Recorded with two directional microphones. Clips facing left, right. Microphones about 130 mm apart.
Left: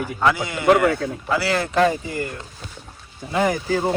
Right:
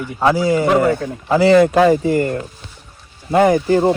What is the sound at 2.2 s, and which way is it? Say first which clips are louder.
Speech: right 10 dB; 45° right (ahead or behind).